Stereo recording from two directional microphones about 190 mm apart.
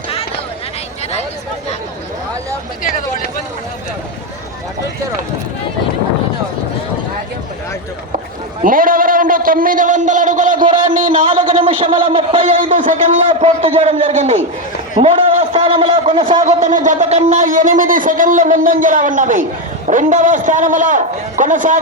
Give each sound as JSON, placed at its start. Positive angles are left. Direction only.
{"t": 8.6, "sound": "speech", "side_deg": -45}
{"t": 11.5, "sound": "speech", "side_deg": -25}
{"t": 12.5, "sound": "a man's voice", "side_deg": -45}
{"t": 15.5, "sound": "a sound", "side_deg": -25}
{"t": 16.4, "sound": "a man's voice", "side_deg": -40}